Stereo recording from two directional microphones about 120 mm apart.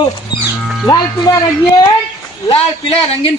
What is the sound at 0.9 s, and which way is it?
Speech, 30° left (ahead or behind).